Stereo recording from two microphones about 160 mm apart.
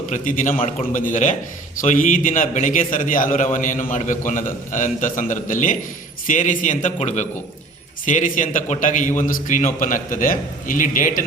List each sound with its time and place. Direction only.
0.1 s a man's voice: 55° left (ahead or behind)
0.5 s a man's voice: 35° left (ahead or behind)
0.9 s a man's voice: 55° left (ahead or behind)